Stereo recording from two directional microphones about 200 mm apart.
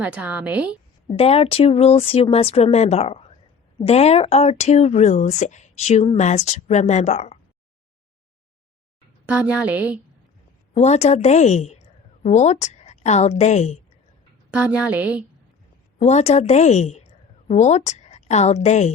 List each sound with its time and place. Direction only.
0.0 s a woman's voice: 5° right (ahead or behind)
1.1 s speech: 30° left (ahead or behind)
9.2 s a woman's voice: 5° right (ahead or behind)
10.8 s a woman's voice: 35° left (ahead or behind)
14.5 s a woman's voice: 5° right (ahead or behind)
16.0 s a woman's voice: 35° left (ahead or behind)